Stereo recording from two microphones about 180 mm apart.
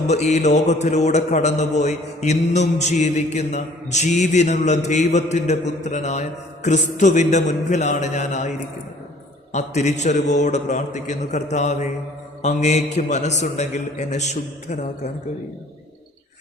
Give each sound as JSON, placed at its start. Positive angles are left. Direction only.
{"t": 0.1, "sound": "a man's voice", "side_deg": 40}